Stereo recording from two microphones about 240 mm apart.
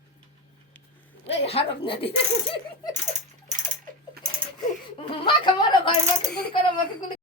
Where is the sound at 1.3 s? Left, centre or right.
Left.